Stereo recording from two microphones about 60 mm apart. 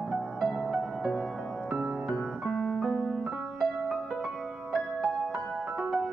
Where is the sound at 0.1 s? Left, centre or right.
Centre.